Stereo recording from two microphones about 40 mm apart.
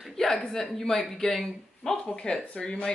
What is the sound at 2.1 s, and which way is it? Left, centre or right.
Speech, left.